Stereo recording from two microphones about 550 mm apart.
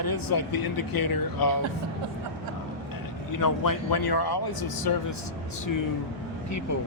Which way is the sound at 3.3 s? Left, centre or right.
Left.